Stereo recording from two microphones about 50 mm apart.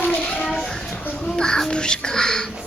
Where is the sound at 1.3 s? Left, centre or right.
Centre.